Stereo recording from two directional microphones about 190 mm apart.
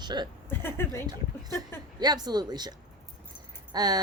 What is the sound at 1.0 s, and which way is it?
Speech, 20° right (ahead or behind).